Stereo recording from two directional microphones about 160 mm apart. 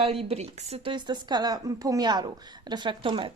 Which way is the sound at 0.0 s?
40° right (ahead or behind).